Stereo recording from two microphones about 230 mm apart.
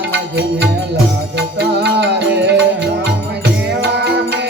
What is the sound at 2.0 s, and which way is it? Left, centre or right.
Music, right.